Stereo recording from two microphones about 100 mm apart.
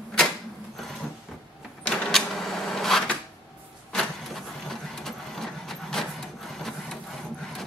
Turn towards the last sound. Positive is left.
turn(degrees=5)  # may be behind; listen again after turning